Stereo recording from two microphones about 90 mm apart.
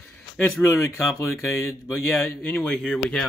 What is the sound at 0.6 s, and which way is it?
Speech, 30° left (ahead or behind).